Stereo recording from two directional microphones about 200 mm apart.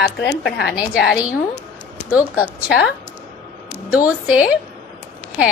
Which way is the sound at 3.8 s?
5° right (ahead or behind).